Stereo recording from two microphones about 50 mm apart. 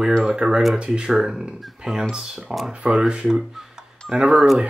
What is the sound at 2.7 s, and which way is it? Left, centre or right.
Speech, right.